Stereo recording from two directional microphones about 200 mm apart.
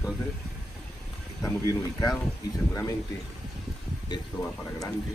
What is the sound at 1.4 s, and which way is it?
Speech, 15° left (ahead or behind).